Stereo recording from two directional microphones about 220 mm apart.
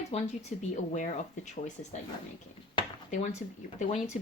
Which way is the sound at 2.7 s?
20° left (ahead or behind).